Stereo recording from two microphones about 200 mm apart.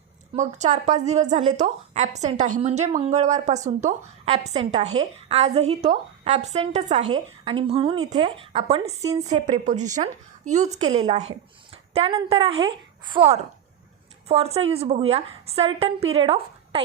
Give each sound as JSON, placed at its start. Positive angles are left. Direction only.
{"t": 0.3, "sound": "a woman's voice", "side_deg": -35}